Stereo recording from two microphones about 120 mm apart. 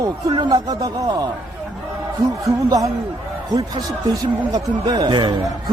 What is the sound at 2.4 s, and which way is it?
Speech, 30° right (ahead or behind).